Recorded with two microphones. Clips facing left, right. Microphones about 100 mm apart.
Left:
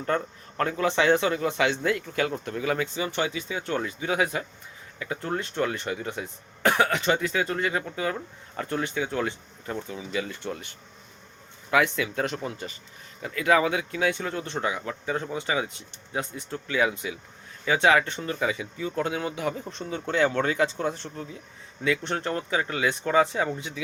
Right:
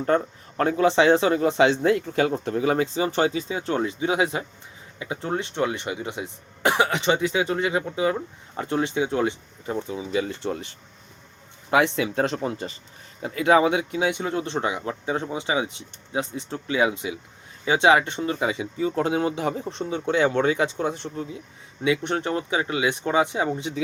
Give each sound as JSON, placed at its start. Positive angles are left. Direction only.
{"t": 0.0, "sound": "speech", "side_deg": -30}